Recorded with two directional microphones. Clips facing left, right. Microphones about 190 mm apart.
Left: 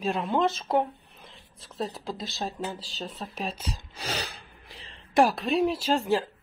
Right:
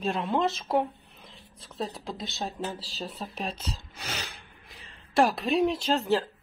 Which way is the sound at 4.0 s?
35° left (ahead or behind).